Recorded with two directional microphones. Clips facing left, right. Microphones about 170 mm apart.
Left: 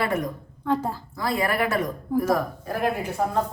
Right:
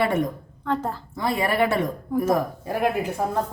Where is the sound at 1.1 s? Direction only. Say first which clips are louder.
Right 2 dB; 25° right (ahead or behind).